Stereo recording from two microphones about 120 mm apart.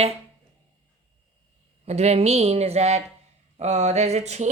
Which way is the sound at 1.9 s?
65° right (ahead or behind).